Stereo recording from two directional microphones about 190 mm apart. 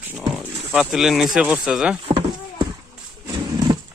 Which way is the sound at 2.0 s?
25° right (ahead or behind).